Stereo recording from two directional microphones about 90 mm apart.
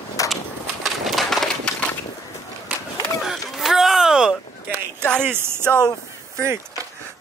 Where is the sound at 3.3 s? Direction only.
5° right (ahead or behind).